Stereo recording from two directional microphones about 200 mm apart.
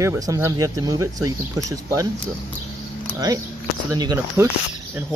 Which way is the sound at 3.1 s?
20° right (ahead or behind).